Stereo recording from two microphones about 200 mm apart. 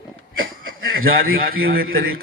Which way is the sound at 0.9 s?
50° right (ahead or behind).